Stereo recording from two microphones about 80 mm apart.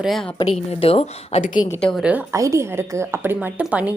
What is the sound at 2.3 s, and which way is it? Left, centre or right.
A woman's voice, right.